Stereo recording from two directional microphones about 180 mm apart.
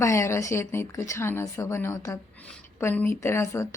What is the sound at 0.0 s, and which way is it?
A woman's voice, 15° left (ahead or behind).